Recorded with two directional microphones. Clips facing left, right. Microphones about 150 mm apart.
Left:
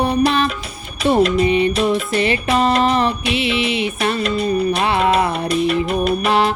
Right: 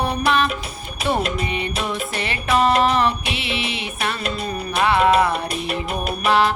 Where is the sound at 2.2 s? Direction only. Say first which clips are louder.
Even; 25° left (ahead or behind).